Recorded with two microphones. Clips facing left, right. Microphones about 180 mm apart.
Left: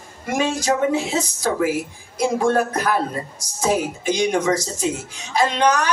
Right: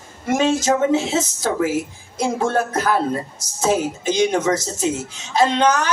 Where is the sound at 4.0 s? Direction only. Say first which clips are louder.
Right 2 dB; 20° right (ahead or behind).